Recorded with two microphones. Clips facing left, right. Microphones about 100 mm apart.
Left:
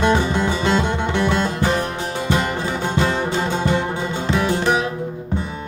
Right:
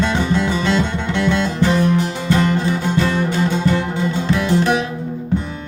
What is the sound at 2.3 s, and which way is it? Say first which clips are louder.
Music: right 6 dB; 15° left (ahead or behind).